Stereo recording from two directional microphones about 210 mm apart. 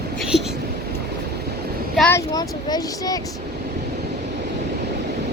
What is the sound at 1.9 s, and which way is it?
Speech, 5° left (ahead or behind).